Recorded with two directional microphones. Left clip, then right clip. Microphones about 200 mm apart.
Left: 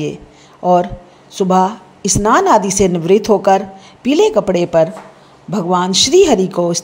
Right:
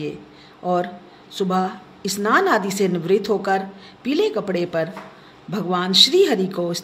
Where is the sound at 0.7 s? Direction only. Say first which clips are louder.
Left 9 dB; 30° left (ahead or behind).